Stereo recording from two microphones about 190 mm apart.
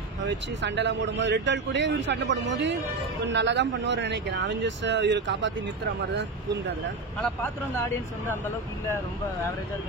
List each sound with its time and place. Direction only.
0.2 s speech: 70° right (ahead or behind)
7.2 s speech: 5° left (ahead or behind)